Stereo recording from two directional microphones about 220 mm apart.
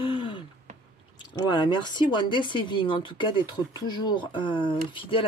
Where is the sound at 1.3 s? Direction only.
20° left (ahead or behind).